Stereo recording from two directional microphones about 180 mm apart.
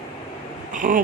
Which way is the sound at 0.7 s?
45° right (ahead or behind).